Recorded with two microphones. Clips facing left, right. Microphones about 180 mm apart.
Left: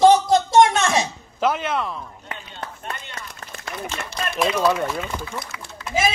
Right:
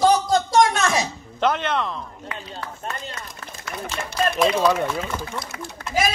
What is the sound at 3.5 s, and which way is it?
Run, 70° left (ahead or behind).